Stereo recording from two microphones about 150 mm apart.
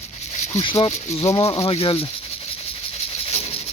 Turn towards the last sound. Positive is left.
turn(degrees=45)  # may be behind; listen again after turning